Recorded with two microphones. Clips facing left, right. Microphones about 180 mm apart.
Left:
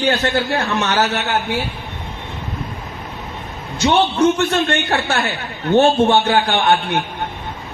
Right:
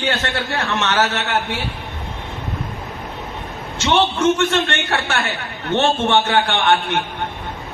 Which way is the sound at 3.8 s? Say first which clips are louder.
Left 2 dB; 35° left (ahead or behind).